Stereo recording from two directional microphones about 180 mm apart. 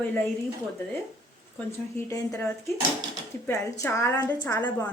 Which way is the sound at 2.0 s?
15° left (ahead or behind).